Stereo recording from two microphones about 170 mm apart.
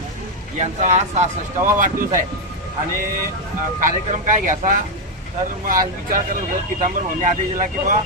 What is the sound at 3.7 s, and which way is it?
Speech, 50° right (ahead or behind).